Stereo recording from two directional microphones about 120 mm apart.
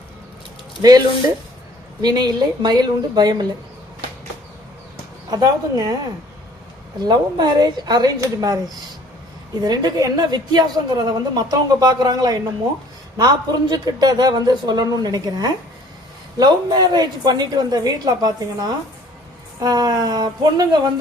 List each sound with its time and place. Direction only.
0.8 s a woman's voice: 30° right (ahead or behind)
5.3 s a woman's voice: 30° right (ahead or behind)
7.0 s a woman's voice: 35° right (ahead or behind)